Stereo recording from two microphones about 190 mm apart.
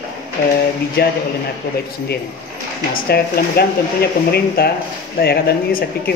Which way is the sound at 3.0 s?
55° left (ahead or behind).